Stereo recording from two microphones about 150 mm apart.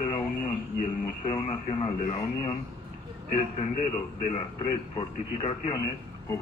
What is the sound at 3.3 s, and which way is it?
A man's voice, 45° left (ahead or behind).